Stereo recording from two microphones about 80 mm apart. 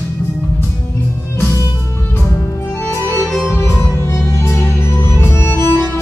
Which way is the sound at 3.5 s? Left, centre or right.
Left.